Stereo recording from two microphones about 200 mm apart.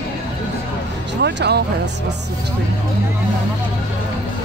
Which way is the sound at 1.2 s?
55° right (ahead or behind).